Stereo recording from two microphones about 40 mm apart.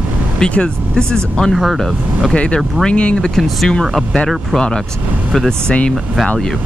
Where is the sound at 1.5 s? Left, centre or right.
Centre.